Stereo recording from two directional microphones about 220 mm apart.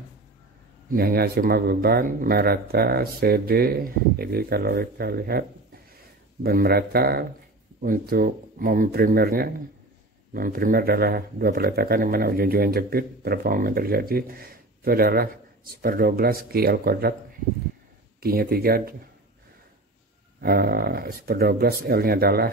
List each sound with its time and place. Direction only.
0.8 s speech: 45° right (ahead or behind)
6.4 s speech: 45° right (ahead or behind)
18.2 s speech: 45° right (ahead or behind)
20.3 s speech: 45° right (ahead or behind)